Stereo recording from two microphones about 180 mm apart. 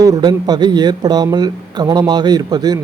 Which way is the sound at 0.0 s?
20° right (ahead or behind).